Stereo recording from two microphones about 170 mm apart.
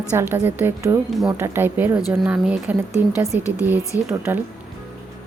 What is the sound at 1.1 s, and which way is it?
Speech, centre (ahead or behind).